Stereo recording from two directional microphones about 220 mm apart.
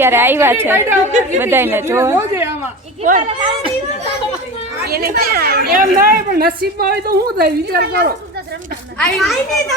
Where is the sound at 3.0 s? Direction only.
35° right (ahead or behind).